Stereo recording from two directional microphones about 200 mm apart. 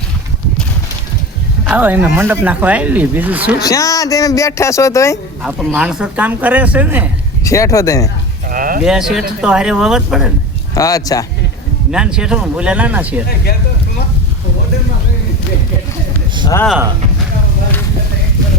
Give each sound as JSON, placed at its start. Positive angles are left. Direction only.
{"t": 1.6, "sound": "speech", "side_deg": -10}
{"t": 3.7, "sound": "speech", "side_deg": 15}
{"t": 5.4, "sound": "speech", "side_deg": 0}
{"t": 7.4, "sound": "speech", "side_deg": 15}
{"t": 8.4, "sound": "a sound", "side_deg": -45}
{"t": 8.8, "sound": "speech", "side_deg": -5}
{"t": 10.8, "sound": "speech", "side_deg": 15}
{"t": 11.9, "sound": "speech", "side_deg": -5}
{"t": 13.2, "sound": "speech", "side_deg": 50}